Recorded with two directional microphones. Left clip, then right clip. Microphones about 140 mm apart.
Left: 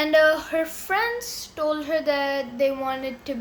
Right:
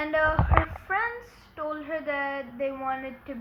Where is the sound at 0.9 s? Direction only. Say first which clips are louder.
Left 4 dB; 30° left (ahead or behind).